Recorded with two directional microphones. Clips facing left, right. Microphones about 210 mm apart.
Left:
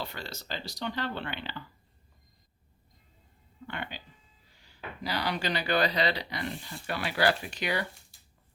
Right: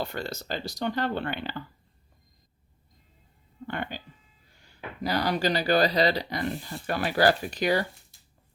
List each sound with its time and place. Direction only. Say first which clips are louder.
0.0 s speech: right 7 dB; 45° right (ahead or behind)
3.7 s speech: right 6 dB; 45° right (ahead or behind)
5.0 s speech: right 6 dB; 45° right (ahead or behind)